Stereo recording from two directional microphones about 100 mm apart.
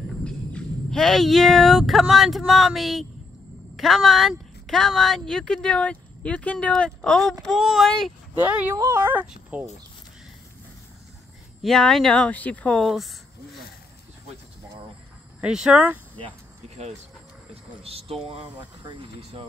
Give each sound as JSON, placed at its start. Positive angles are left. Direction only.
{"t": 0.2, "sound": "a woman's voice", "side_deg": 10}
{"t": 8.4, "sound": "speech", "side_deg": -20}
{"t": 8.7, "sound": "speech", "side_deg": -30}
{"t": 11.6, "sound": "speech", "side_deg": 5}
{"t": 12.8, "sound": "a woman's voice", "side_deg": 0}
{"t": 15.4, "sound": "speech", "side_deg": -10}
{"t": 16.2, "sound": "a sound", "side_deg": -75}
{"t": 17.8, "sound": "speech", "side_deg": -75}
{"t": 18.9, "sound": "speech", "side_deg": -60}